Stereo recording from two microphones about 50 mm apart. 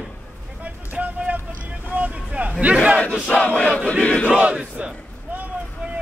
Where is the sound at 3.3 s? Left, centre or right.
Left.